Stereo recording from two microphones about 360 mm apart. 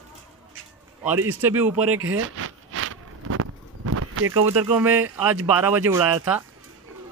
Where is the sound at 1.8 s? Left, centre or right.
Right.